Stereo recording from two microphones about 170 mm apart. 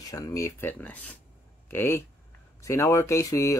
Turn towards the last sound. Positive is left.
turn(degrees=20)  # may be behind; listen again after turning